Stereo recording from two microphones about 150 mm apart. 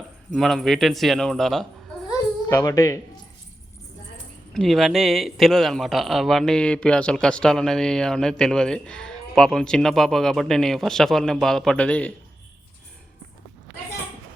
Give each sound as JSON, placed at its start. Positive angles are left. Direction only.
{"t": 0.3, "sound": "speech", "side_deg": 0}
{"t": 2.5, "sound": "a woman's voice", "side_deg": 20}
{"t": 4.5, "sound": "speech", "side_deg": 0}